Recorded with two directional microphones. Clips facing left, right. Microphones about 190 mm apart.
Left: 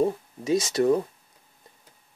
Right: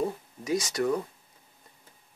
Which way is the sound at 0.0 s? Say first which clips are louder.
Left 6 dB; 25° left (ahead or behind).